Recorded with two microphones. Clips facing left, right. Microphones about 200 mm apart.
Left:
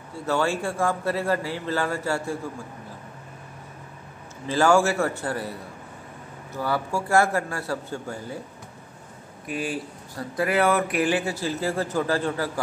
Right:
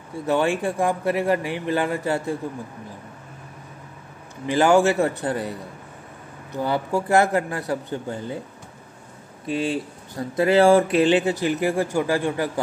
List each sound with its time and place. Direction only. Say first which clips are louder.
0.1 s speech: right 3 dB; 20° right (ahead or behind)
4.5 s speech: right 3 dB; 20° right (ahead or behind)
9.5 s speech: right 5 dB; 25° right (ahead or behind)